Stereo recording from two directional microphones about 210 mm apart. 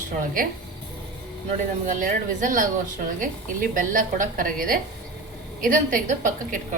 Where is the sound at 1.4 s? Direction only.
40° right (ahead or behind).